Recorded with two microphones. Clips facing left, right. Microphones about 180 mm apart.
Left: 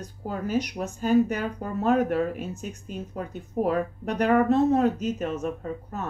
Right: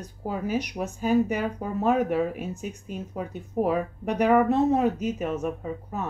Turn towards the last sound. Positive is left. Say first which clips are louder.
# right 1 dB
turn(degrees=-10)  # may be behind; listen again after turning